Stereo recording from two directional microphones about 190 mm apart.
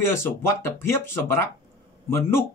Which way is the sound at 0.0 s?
15° left (ahead or behind).